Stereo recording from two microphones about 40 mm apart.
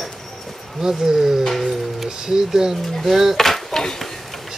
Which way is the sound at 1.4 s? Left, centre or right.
Centre.